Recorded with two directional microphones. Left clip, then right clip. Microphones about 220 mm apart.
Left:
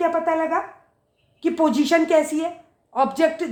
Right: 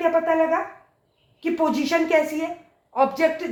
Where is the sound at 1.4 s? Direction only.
55° left (ahead or behind).